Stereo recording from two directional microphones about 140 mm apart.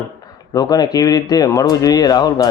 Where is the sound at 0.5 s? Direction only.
25° left (ahead or behind).